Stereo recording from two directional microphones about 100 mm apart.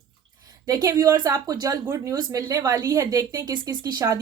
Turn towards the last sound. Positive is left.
turn(degrees=-35)  # may be behind; listen again after turning